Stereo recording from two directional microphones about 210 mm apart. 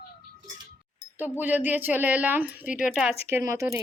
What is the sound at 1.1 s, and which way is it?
A woman's voice, 10° right (ahead or behind).